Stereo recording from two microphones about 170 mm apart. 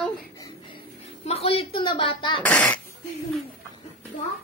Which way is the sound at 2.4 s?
10° left (ahead or behind).